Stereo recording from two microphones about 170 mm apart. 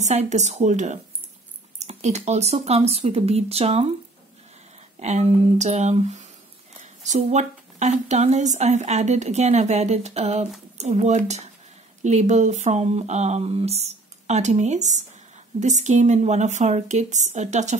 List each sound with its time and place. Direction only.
0.0 s a woman's voice: 40° right (ahead or behind)
5.0 s a woman's voice: 40° right (ahead or behind)